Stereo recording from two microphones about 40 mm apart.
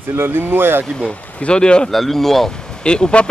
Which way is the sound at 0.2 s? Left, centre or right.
Right.